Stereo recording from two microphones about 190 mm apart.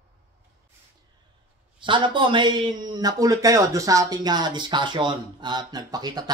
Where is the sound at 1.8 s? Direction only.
25° right (ahead or behind).